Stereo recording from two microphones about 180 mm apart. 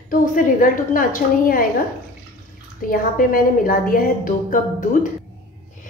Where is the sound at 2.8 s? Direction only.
50° left (ahead or behind).